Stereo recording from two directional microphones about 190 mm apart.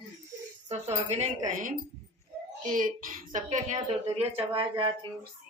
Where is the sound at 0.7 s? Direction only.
35° right (ahead or behind).